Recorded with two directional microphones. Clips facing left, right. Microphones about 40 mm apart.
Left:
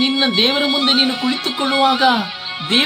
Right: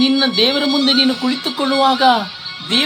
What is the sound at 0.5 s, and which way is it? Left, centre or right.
Speech, left.